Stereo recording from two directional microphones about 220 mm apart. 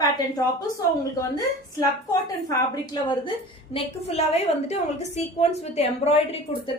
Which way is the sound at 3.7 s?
30° left (ahead or behind).